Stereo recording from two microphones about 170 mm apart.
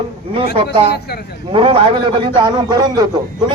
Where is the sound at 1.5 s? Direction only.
30° right (ahead or behind).